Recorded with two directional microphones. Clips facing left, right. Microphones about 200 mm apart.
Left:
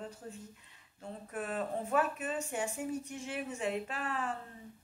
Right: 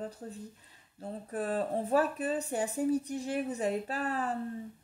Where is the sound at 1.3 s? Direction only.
35° right (ahead or behind).